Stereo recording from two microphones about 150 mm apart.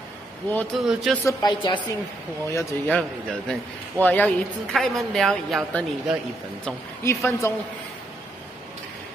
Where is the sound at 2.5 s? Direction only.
15° left (ahead or behind).